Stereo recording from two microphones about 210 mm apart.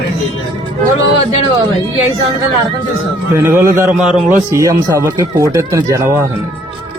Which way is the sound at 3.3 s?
15° right (ahead or behind).